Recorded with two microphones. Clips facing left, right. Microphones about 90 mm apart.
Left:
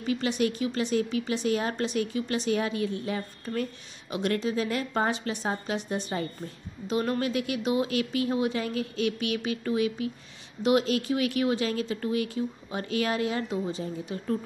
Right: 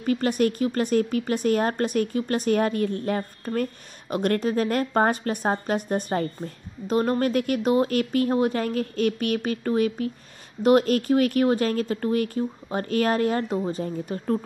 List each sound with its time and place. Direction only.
0.0 s a woman's voice: 45° right (ahead or behind)